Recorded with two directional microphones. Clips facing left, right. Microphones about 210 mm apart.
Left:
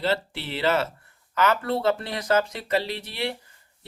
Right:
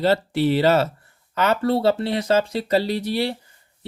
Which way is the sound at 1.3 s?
30° right (ahead or behind).